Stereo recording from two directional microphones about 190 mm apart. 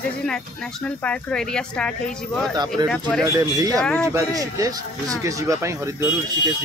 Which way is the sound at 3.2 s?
15° right (ahead or behind).